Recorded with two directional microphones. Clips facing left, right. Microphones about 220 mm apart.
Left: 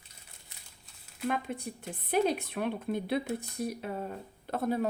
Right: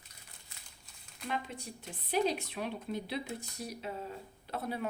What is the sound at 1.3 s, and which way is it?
Speech, 55° left (ahead or behind).